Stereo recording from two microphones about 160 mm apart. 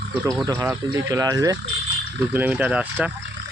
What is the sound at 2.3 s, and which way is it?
Speech, 10° right (ahead or behind).